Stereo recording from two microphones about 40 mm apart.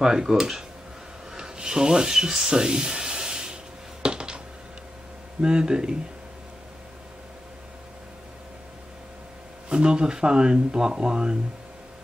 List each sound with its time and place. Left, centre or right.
0.0 s speech: centre
1.3 s rub: centre
4.0 s a sound: right
5.4 s speech: right
9.7 s speech: right